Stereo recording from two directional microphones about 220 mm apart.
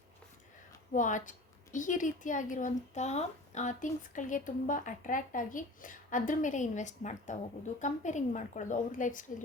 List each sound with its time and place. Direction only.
0.9 s a woman's voice: 35° left (ahead or behind)